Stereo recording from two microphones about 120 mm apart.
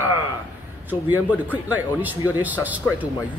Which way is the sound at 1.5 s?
15° right (ahead or behind).